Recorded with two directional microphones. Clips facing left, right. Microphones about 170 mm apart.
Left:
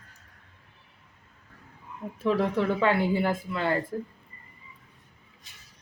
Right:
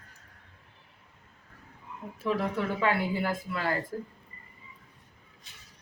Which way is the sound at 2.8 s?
25° left (ahead or behind).